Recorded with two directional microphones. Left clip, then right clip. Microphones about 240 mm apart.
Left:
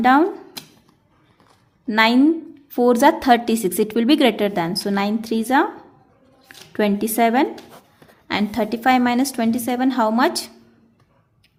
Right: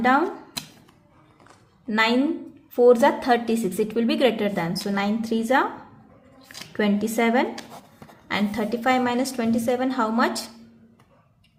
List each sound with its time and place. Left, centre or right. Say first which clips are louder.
0.0 s a woman's voice: left 5 dB; left
1.9 s a woman's voice: left 6 dB; left
6.7 s a woman's voice: left 4 dB; left